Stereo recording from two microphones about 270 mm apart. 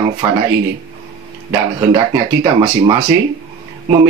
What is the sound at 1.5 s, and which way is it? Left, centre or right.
Speech, centre.